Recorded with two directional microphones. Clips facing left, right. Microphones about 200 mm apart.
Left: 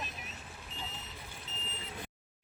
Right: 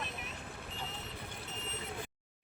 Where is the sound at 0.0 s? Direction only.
60° right (ahead or behind).